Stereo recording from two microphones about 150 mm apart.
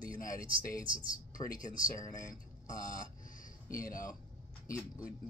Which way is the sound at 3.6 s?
65° left (ahead or behind).